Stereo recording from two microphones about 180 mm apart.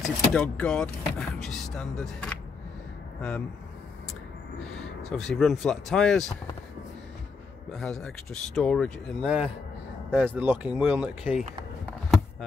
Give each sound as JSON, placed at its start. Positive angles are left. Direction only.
{"t": 0.0, "sound": "speech", "side_deg": 5}
{"t": 5.1, "sound": "speech", "side_deg": 5}
{"t": 7.7, "sound": "speech", "side_deg": 5}